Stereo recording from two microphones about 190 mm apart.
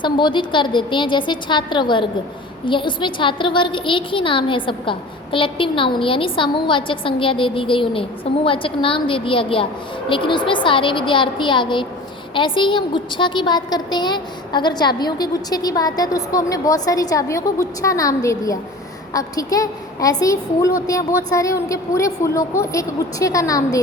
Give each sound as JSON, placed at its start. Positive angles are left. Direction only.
{"t": 0.0, "sound": "a woman's voice", "side_deg": 25}